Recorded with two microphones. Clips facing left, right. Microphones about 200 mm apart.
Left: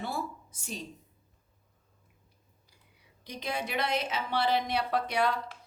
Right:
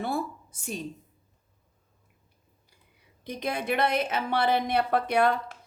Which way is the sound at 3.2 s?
55° right (ahead or behind).